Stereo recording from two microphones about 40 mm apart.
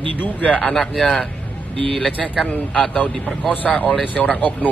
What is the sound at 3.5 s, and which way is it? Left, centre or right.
A man's voice, left.